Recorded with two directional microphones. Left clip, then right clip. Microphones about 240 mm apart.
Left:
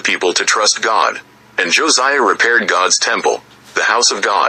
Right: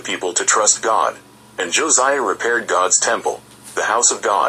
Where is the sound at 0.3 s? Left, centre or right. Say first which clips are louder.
Left 3 dB; left.